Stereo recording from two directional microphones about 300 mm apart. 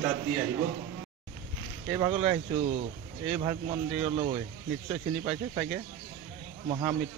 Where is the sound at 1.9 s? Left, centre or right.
Centre.